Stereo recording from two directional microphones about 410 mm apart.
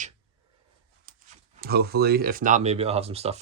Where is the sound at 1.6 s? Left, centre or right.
Right.